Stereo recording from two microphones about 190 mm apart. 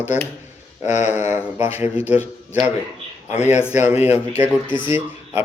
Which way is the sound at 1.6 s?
10° right (ahead or behind).